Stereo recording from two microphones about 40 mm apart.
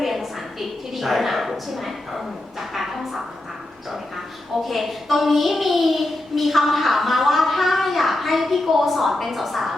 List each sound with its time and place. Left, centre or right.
0.0 s a woman's voice: centre
4.5 s a child's voice: centre